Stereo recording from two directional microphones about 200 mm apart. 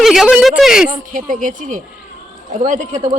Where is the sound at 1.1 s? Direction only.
40° right (ahead or behind).